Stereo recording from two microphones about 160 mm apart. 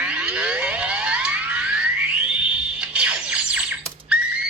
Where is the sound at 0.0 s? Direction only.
5° right (ahead or behind).